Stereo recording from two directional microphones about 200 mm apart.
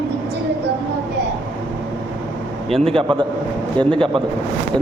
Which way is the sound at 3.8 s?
25° right (ahead or behind).